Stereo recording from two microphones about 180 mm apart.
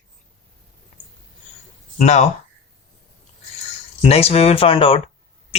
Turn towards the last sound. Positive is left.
turn(degrees=35)  # may be behind; listen again after turning